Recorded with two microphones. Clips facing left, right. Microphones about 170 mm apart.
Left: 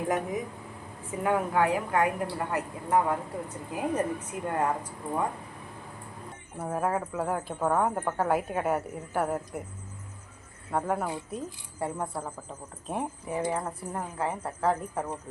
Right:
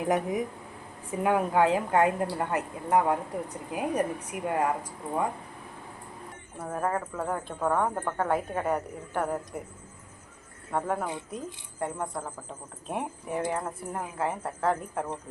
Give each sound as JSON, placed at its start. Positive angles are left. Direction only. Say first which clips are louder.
{"t": 0.0, "sound": "a woman's voice", "louder": "right 2 dB", "side_deg": -20}
{"t": 6.6, "sound": "a woman's voice", "louder": "left 1 dB", "side_deg": 5}
{"t": 10.7, "sound": "a woman's voice", "louder": "left 1 dB", "side_deg": 0}